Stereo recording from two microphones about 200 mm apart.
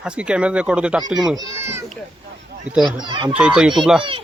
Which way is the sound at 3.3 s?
5° right (ahead or behind).